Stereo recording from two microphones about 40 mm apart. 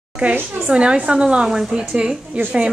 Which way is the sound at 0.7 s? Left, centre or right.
Right.